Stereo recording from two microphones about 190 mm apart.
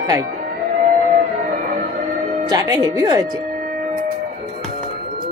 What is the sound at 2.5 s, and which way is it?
Speech, 20° right (ahead or behind).